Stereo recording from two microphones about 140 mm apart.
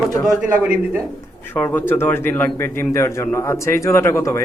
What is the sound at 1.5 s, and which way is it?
A man's voice, 15° left (ahead or behind).